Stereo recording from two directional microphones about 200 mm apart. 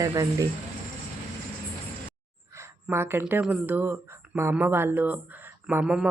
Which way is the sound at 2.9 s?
10° right (ahead or behind).